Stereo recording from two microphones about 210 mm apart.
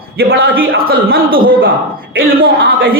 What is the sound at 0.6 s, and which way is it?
A woman's voice, 45° right (ahead or behind).